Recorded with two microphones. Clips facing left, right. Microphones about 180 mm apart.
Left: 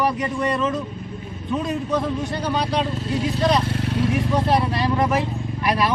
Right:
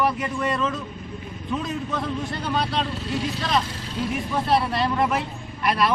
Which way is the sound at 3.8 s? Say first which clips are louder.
Left 6 dB; 65° left (ahead or behind).